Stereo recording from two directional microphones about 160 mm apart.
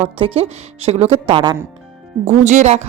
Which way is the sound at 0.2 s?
40° right (ahead or behind).